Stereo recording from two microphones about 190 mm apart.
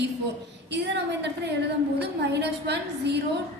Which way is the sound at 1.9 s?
65° right (ahead or behind).